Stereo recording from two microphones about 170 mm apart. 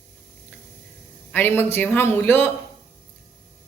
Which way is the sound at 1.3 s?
15° left (ahead or behind).